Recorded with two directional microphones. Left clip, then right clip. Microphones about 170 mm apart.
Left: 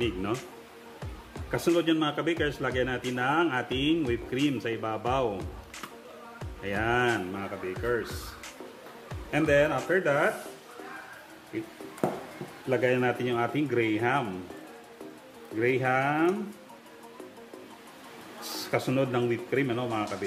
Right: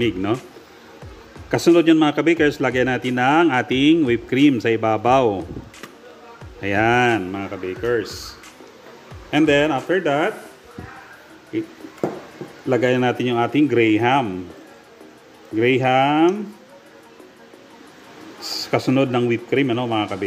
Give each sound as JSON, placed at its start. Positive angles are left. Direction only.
{"t": 1.5, "sound": "a man's voice", "side_deg": -40}
{"t": 6.6, "sound": "a man's voice", "side_deg": -45}
{"t": 9.3, "sound": "a man's voice", "side_deg": -40}
{"t": 12.6, "sound": "a man's voice", "side_deg": -40}
{"t": 15.6, "sound": "a man's voice", "side_deg": -40}
{"t": 18.7, "sound": "a man's voice", "side_deg": -35}